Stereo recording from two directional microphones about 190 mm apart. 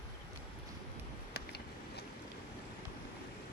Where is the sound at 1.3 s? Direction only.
60° left (ahead or behind).